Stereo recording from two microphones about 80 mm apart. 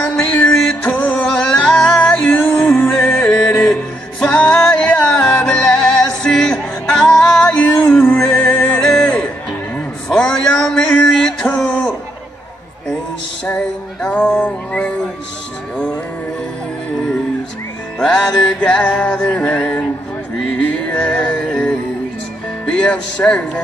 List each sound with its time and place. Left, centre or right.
0.5 s music: centre
10.0 s a sound: centre
11.1 s music: centre
13.5 s music: centre
17.9 s music: centre
22.7 s speech: centre